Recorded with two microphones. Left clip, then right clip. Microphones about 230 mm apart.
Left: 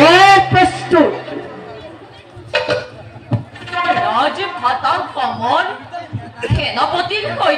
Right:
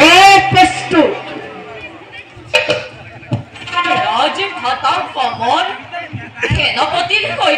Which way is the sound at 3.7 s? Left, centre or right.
Right.